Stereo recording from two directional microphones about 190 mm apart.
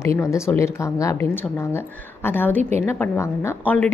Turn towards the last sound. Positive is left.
turn(degrees=10)  # may be behind; listen again after turning